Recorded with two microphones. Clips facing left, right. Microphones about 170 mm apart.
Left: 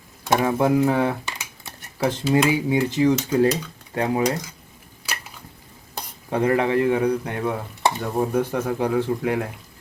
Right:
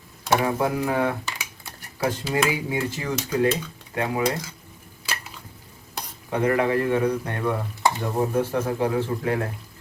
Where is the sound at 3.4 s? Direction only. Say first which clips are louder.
Left 3 dB; 35° left (ahead or behind).